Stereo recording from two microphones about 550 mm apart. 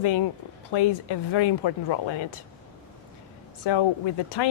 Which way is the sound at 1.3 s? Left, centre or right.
Left.